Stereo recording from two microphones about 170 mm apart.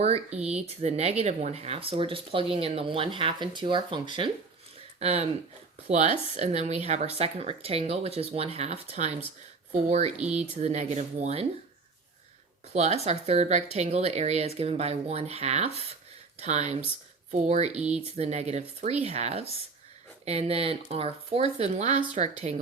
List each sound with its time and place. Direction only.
0.0 s speech: 40° right (ahead or behind)
12.7 s speech: 40° right (ahead or behind)